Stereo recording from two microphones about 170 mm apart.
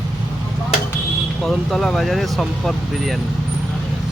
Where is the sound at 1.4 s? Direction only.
Centre (ahead or behind).